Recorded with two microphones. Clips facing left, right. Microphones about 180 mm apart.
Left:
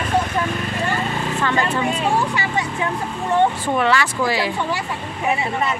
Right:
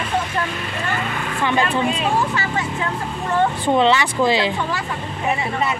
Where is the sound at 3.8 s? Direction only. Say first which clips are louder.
Right 2 dB; 20° right (ahead or behind).